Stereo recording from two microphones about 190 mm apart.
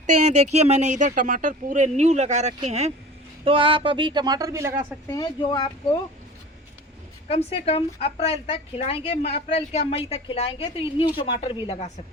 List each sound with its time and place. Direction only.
0.5 s speech: 35° right (ahead or behind); by 4.9 s 15° right (ahead or behind)
5.1 s a woman's voice: 20° left (ahead or behind)
7.3 s a woman's voice: 30° left (ahead or behind)